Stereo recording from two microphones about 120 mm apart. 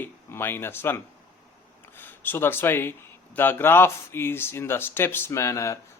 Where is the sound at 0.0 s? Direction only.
20° left (ahead or behind).